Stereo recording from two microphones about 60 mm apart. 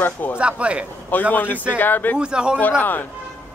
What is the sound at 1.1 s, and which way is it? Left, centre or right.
Speech, left.